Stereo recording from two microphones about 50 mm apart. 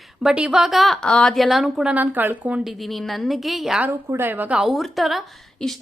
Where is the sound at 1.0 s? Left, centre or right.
Centre.